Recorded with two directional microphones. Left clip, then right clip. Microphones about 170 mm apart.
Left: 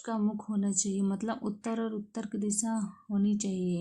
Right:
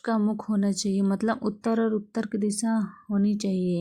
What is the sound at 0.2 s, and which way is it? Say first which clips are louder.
A woman's voice: right 6 dB; 30° right (ahead or behind).